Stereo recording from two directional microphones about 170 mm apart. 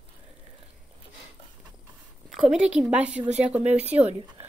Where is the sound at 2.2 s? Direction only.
Centre (ahead or behind).